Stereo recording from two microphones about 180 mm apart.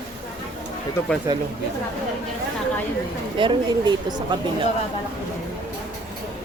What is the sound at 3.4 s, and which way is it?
Speech, 25° right (ahead or behind).